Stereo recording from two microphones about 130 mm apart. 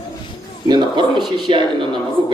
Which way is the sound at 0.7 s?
35° right (ahead or behind).